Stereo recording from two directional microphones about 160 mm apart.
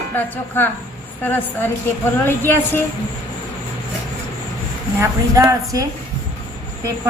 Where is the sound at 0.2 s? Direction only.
15° left (ahead or behind).